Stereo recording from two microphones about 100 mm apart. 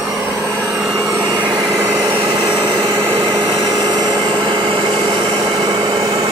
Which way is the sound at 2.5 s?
60° right (ahead or behind).